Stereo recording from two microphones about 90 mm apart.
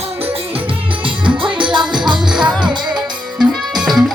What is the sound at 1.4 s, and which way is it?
Music, 65° right (ahead or behind).